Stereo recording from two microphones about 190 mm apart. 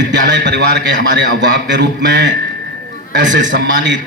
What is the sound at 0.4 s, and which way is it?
A man's voice, 65° right (ahead or behind).